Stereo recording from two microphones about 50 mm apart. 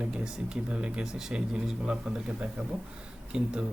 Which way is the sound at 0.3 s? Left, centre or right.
Centre.